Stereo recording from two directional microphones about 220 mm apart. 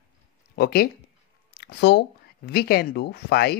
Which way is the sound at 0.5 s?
45° left (ahead or behind).